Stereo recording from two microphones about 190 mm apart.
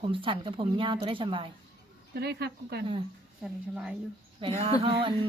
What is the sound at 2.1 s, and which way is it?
Speech, 60° right (ahead or behind).